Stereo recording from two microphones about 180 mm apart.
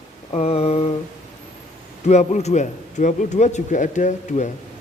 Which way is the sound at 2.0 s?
40° left (ahead or behind).